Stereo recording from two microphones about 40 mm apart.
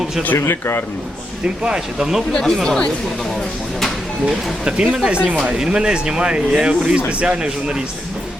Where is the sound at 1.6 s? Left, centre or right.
Right.